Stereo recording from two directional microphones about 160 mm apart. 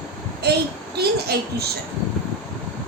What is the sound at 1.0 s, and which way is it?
Speech, 85° right.